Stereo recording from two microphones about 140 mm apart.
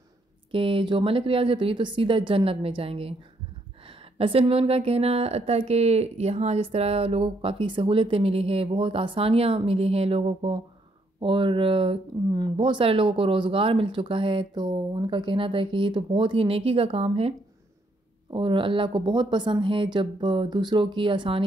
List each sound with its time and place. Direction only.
0.5 s speech: 40° right (ahead or behind)
18.3 s speech: 35° right (ahead or behind)